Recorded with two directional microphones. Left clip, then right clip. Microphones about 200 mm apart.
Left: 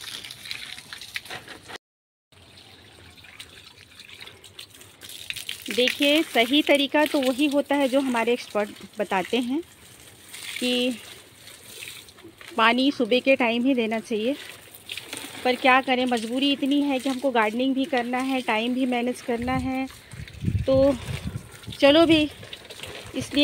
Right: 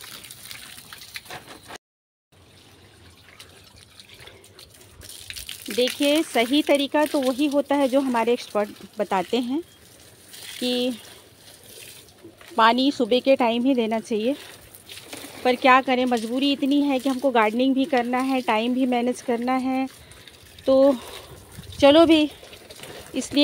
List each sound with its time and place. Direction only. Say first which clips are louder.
1.7 s a sound: even; 30° right (ahead or behind)
5.9 s speech: even; 5° right (ahead or behind)
10.6 s speech: even; 5° right (ahead or behind)
12.5 s speech: right 2 dB; 5° right (ahead or behind)